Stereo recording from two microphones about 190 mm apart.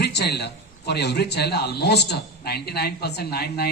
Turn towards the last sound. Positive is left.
turn(degrees=55)  # may be behind; listen again after turning